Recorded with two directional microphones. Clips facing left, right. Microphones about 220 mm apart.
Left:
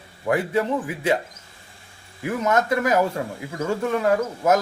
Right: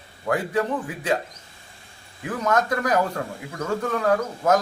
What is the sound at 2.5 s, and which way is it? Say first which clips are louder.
A man's voice: left 1 dB; 25° left (ahead or behind).